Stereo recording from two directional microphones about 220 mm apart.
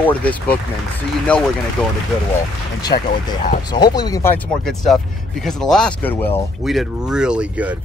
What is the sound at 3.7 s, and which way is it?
Speech, 20° left (ahead or behind).